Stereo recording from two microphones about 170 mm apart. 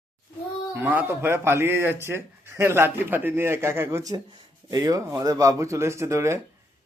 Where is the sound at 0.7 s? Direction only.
10° right (ahead or behind).